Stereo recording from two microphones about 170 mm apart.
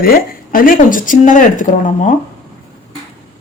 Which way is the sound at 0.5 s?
55° left (ahead or behind).